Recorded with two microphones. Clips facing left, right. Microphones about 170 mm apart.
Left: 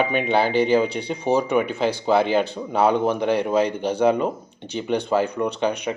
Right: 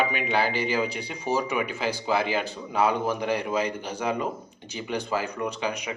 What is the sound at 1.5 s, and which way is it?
Speech, 5° right (ahead or behind).